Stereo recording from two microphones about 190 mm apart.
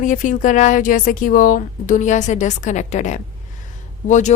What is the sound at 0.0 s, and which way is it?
A woman's voice, 45° left (ahead or behind).